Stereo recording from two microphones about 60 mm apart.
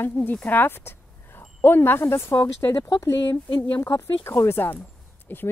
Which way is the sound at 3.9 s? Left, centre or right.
Left.